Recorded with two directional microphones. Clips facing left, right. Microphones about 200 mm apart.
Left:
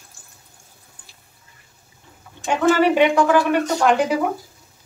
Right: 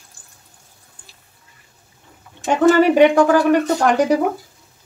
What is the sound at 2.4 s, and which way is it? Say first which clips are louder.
Speech: right 4 dB; 45° right (ahead or behind).